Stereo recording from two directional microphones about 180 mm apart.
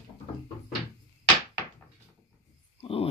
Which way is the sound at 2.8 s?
30° left (ahead or behind).